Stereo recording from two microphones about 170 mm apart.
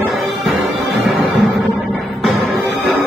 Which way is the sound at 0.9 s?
Centre (ahead or behind).